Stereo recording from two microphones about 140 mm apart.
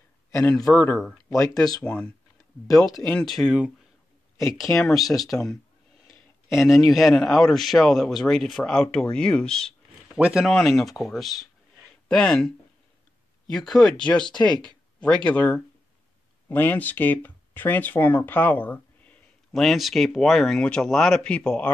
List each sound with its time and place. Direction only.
0.3 s a man's voice: 20° left (ahead or behind)
0.9 s speech: centre (ahead or behind)
1.3 s speech: 20° left (ahead or behind)
1.9 s speech: 5° left (ahead or behind)
2.7 s speech: 25° left (ahead or behind)
3.1 s speech: 5° left (ahead or behind)
6.6 s speech: centre (ahead or behind)
10.2 s speech: 5° right (ahead or behind); by 19.6 s 10° left (ahead or behind)
19.6 s speech: centre (ahead or behind)